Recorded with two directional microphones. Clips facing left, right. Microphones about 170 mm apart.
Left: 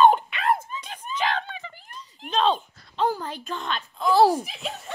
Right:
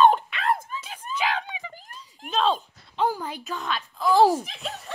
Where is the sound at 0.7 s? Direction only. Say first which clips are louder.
Left 1 dB; 5° right (ahead or behind).